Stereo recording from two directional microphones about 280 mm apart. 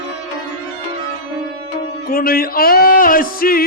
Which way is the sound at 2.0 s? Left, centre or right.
Left.